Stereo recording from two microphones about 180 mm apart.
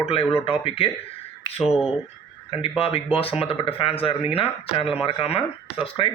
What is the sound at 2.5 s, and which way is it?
Speech, 30° left (ahead or behind).